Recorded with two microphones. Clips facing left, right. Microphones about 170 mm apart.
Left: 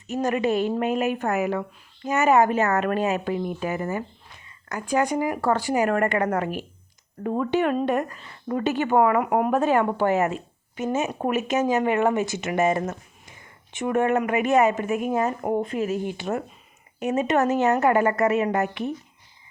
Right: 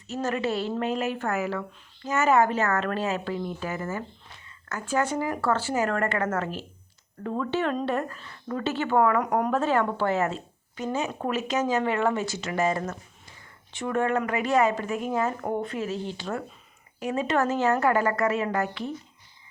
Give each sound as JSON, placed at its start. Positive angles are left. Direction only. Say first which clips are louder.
{"t": 0.1, "sound": "a woman's voice", "louder": "left 5 dB", "side_deg": 15}